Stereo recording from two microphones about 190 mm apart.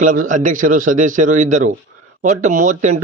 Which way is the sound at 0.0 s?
40° right (ahead or behind).